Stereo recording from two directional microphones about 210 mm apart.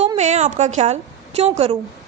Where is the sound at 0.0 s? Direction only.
30° right (ahead or behind).